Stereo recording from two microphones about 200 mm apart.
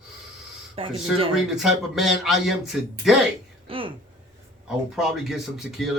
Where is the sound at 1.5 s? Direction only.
Centre (ahead or behind).